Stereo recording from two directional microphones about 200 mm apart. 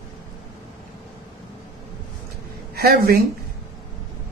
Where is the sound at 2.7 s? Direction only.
50° right (ahead or behind).